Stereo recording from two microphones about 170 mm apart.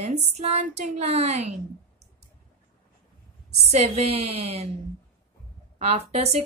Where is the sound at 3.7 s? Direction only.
40° right (ahead or behind).